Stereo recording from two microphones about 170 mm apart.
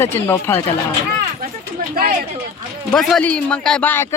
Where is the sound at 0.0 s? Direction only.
15° left (ahead or behind).